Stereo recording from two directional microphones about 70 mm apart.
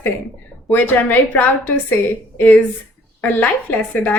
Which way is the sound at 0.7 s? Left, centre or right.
Left.